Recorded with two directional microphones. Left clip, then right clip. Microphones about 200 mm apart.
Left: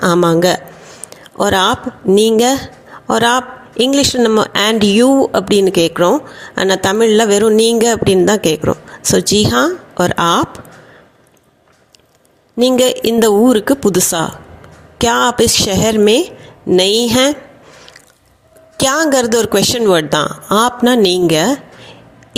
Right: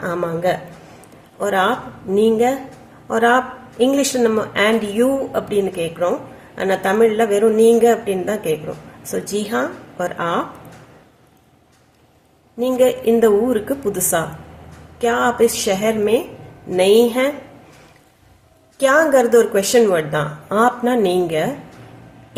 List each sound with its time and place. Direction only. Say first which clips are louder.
0.0 s a man's voice: left 9 dB; 50° left (ahead or behind)
12.5 s a man's voice: left 4 dB; 50° left (ahead or behind)
18.8 s a man's voice: even; 50° left (ahead or behind)